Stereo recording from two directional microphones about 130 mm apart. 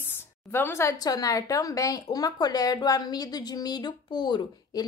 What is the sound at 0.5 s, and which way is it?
A woman's voice, 20° left (ahead or behind).